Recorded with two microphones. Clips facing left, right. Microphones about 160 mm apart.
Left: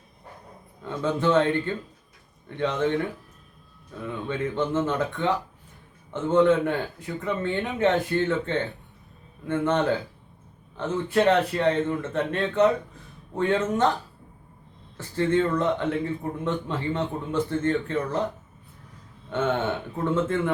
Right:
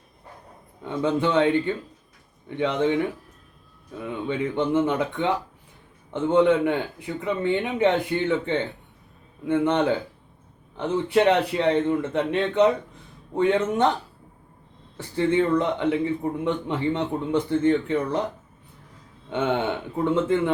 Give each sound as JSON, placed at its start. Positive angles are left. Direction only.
{"t": 0.9, "sound": "a man's voice", "side_deg": -15}
{"t": 4.3, "sound": "a man's voice", "side_deg": -15}
{"t": 14.9, "sound": "a man's voice", "side_deg": -15}
{"t": 19.3, "sound": "a man's voice", "side_deg": -15}